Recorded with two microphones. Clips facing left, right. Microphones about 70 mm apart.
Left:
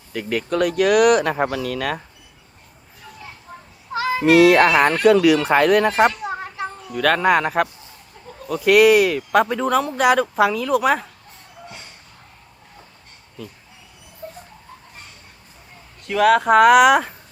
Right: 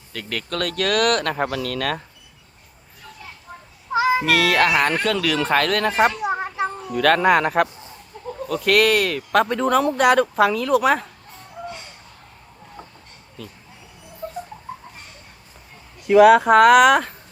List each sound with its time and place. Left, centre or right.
0.1 s speech: centre
3.9 s cat: centre
4.3 s speech: left
5.9 s speech: centre
6.2 s children playing: centre
6.9 s speech: centre
13.4 s speech: centre
16.0 s speech: centre